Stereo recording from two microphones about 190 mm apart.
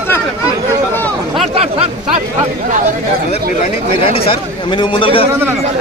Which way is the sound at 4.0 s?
30° left (ahead or behind).